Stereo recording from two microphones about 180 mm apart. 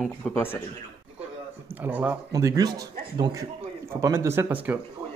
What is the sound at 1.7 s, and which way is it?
Speech, 10° right (ahead or behind).